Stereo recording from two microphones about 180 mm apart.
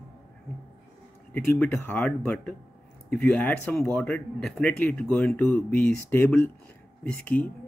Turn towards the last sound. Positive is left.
turn(degrees=10)  # may be behind; listen again after turning